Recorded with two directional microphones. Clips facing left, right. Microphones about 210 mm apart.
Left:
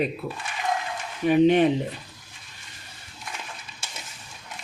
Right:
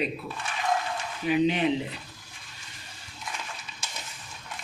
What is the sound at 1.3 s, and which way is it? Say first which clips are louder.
Speech: left 6 dB; 50° left (ahead or behind).